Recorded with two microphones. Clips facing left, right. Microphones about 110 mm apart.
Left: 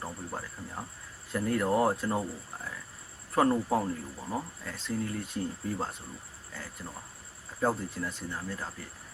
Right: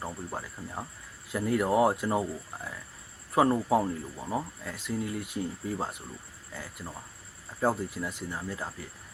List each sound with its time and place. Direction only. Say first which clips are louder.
0.0 s speech: right 2 dB; 10° right (ahead or behind)
3.3 s speech: right 2 dB; 10° right (ahead or behind)
7.6 s speech: right 1 dB; 10° right (ahead or behind)